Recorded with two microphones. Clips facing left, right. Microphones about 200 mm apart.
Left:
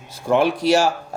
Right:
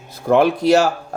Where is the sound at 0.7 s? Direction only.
60° right (ahead or behind).